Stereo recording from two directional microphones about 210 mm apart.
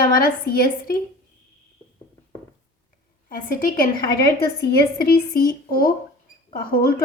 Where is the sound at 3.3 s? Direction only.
40° left (ahead or behind).